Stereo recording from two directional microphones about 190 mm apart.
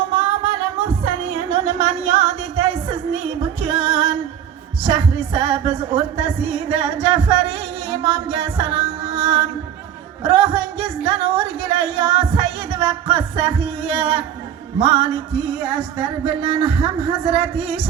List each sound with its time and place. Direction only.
0.2 s music: 30° right (ahead or behind)
4.8 s speech: 30° right (ahead or behind)